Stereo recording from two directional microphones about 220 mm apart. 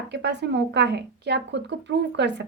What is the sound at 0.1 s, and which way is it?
A woman's voice, 50° right (ahead or behind).